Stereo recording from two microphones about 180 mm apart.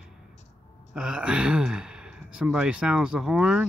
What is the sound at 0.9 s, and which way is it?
Speech, 5° right (ahead or behind).